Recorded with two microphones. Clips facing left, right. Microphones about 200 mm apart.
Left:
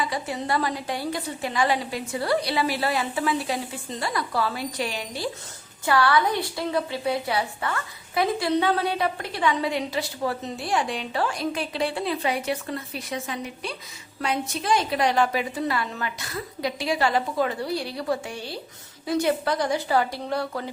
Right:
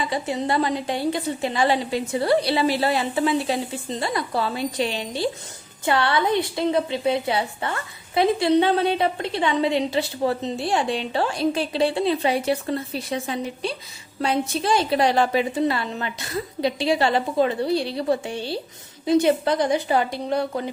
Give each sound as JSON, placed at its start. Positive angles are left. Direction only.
{"t": 0.0, "sound": "a woman's voice", "side_deg": -25}